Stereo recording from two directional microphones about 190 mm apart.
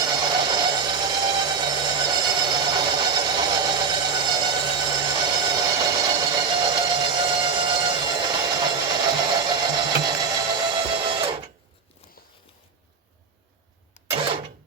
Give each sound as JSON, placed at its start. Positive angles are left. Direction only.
{"t": 0.5, "sound": "alarm clock", "side_deg": -20}
{"t": 14.1, "sound": "mechanisms", "side_deg": -30}